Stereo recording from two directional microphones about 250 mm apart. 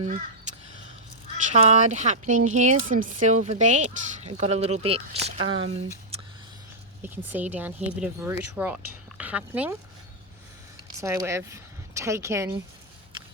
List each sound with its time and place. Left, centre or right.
1.5 s speech: right
7.0 s speech: centre
11.0 s speech: centre